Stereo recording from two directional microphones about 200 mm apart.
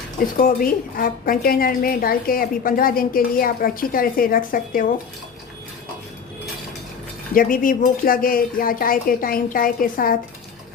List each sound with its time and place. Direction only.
0.3 s a woman's voice: 45° left (ahead or behind)
7.3 s a woman's voice: 45° left (ahead or behind)